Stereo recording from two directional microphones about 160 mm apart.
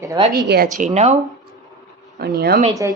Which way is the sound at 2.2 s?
75° right (ahead or behind).